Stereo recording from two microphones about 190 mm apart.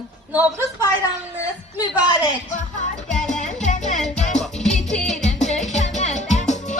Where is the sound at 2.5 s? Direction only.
40° left (ahead or behind).